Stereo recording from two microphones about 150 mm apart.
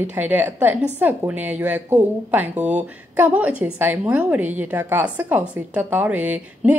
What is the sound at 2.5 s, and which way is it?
Speech, 50° right (ahead or behind).